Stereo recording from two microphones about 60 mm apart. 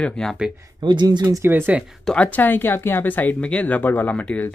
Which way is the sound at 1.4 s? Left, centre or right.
Right.